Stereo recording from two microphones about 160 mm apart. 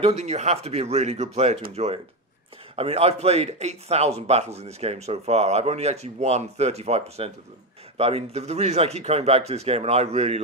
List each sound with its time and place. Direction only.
0.0 s speech: 45° right (ahead or behind)
2.7 s speech: 40° right (ahead or behind)